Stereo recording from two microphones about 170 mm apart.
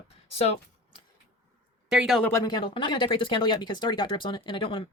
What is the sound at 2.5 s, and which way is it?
Speech, 30° left (ahead or behind).